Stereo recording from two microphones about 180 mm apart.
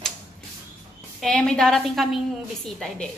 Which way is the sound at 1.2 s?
5° left (ahead or behind).